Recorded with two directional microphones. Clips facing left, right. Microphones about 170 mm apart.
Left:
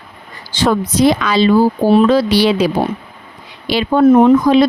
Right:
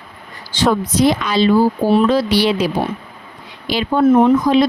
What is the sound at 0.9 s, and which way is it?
A woman's voice, 90° left.